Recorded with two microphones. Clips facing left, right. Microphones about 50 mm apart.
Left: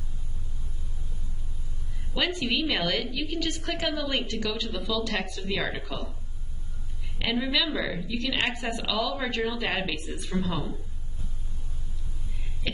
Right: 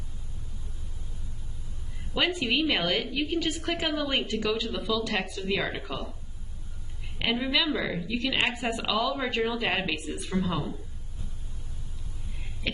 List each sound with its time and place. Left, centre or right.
2.1 s speech: centre
7.2 s a woman's voice: centre
10.3 s speech: right
12.7 s a sound: centre